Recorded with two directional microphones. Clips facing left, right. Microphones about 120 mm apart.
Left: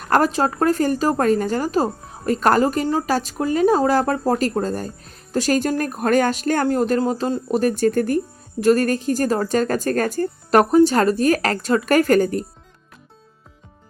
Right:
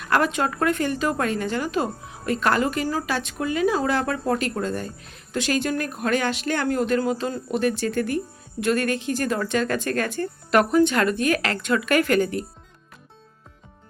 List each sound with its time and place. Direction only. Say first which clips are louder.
0.0 s a woman's voice: left 4 dB; 40° left (ahead or behind)